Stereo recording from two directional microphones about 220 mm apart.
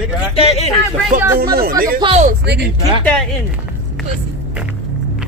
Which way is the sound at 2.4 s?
50° right (ahead or behind).